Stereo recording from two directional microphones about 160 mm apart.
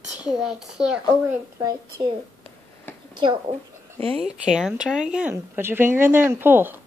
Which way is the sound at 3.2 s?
35° right (ahead or behind).